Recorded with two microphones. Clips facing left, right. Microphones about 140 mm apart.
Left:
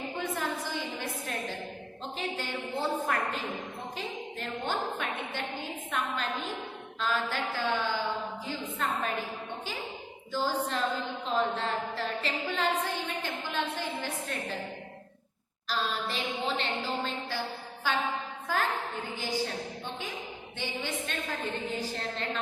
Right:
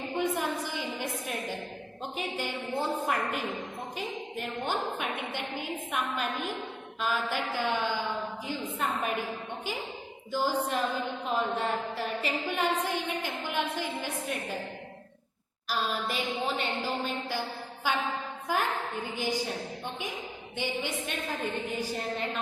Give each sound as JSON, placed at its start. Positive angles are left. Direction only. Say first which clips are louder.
{"t": 0.2, "sound": "a sound", "louder": "right 4 dB", "side_deg": -15}
{"t": 2.1, "sound": "a woman's voice", "louder": "right 1 dB", "side_deg": -15}
{"t": 10.3, "sound": "a woman's voice", "louder": "right 2 dB", "side_deg": -15}
{"t": 15.7, "sound": "a woman's voice", "louder": "right 1 dB", "side_deg": -10}
{"t": 20.6, "sound": "a woman's voice", "louder": "right 3 dB", "side_deg": -15}